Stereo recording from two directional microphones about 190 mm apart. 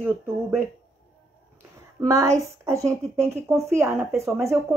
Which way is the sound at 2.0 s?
15° right (ahead or behind).